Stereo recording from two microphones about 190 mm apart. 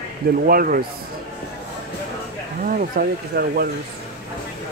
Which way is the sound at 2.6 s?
45° right (ahead or behind).